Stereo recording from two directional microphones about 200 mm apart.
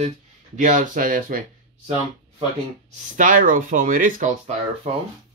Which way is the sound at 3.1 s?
40° right (ahead or behind).